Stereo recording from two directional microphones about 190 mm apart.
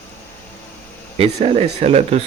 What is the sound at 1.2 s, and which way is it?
Speech, 30° right (ahead or behind).